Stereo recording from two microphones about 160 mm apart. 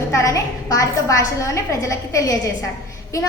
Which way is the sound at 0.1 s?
20° left (ahead or behind).